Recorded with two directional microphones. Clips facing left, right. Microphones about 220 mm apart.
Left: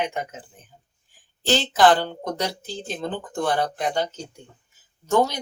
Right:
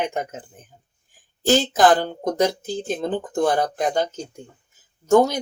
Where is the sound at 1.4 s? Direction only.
45° right (ahead or behind).